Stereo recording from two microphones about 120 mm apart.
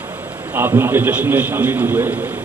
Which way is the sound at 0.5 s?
20° right (ahead or behind).